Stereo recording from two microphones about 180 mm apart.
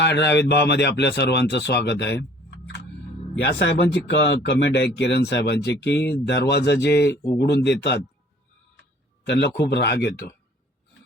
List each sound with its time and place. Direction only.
0.0 s speech: 70° left (ahead or behind)
3.6 s speech: 75° left (ahead or behind)
9.2 s speech: 70° left (ahead or behind)